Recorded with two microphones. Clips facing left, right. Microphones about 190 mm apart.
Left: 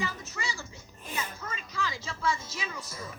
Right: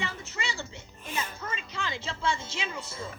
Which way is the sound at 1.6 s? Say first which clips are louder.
Left 1 dB; 25° right (ahead or behind).